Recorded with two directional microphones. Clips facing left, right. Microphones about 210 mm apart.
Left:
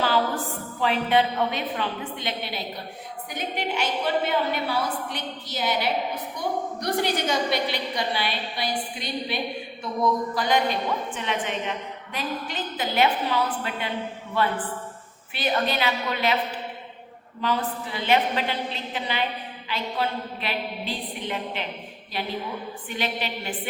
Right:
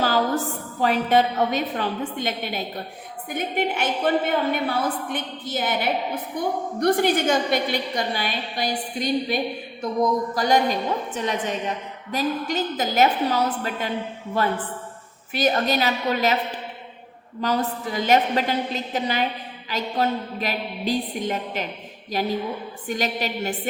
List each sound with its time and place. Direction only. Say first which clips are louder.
0.8 s a woman's voice: right 3 dB; 45° right (ahead or behind)
17.4 s a woman's voice: right 3 dB; 40° right (ahead or behind)